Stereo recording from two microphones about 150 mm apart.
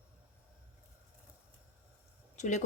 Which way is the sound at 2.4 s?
55° left (ahead or behind).